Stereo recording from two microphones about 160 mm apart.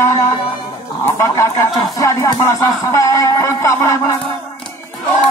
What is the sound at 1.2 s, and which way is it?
Speech, 20° left (ahead or behind).